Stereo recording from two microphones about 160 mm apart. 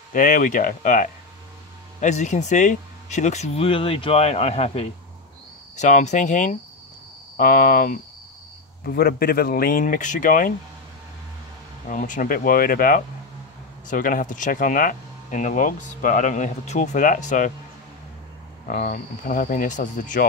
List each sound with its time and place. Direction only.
0.1 s speech: 55° left (ahead or behind)
8.8 s speech: 70° left (ahead or behind)
11.9 s speech: 55° left (ahead or behind)
18.7 s speech: 55° left (ahead or behind)